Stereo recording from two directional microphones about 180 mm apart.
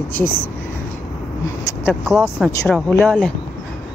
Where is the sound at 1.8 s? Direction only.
5° right (ahead or behind).